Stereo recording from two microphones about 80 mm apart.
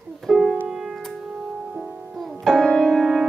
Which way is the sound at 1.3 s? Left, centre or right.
Centre.